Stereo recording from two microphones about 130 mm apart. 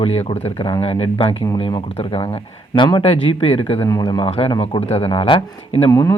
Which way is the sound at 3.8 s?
30° left (ahead or behind).